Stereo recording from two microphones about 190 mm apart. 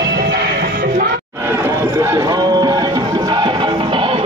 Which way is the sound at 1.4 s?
15° right (ahead or behind).